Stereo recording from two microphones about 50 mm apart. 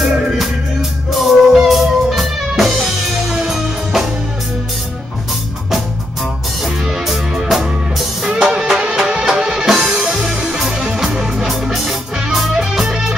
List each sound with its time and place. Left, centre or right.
1.1 s music: centre
6.6 s music: centre